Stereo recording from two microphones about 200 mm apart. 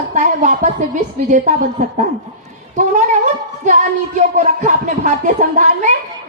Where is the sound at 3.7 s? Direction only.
40° right (ahead or behind).